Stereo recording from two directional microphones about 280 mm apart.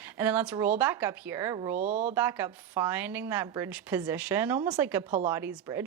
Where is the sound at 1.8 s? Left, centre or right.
Right.